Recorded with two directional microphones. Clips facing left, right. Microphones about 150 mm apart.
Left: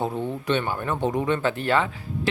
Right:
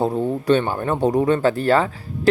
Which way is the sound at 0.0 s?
40° right (ahead or behind).